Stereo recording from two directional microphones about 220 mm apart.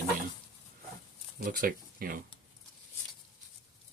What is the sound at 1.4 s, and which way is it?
Speech, 40° right (ahead or behind).